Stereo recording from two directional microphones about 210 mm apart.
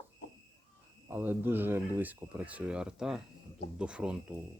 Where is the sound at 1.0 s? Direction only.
10° right (ahead or behind).